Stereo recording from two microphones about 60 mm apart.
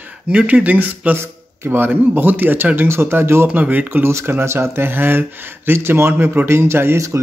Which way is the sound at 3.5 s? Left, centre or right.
Right.